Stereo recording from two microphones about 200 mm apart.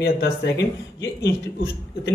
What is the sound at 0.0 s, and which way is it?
Speech, 55° left (ahead or behind).